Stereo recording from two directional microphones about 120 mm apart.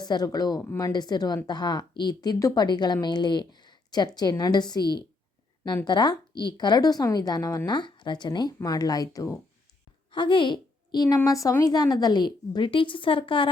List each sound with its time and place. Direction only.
0.0 s speech: 35° left (ahead or behind)
10.1 s a woman's voice: 45° left (ahead or behind)